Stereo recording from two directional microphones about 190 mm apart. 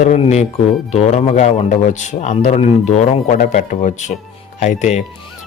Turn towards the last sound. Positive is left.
turn(degrees=40)  # may be behind; listen again after turning